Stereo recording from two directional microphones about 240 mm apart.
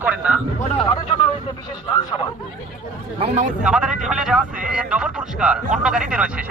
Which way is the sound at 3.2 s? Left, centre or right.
Right.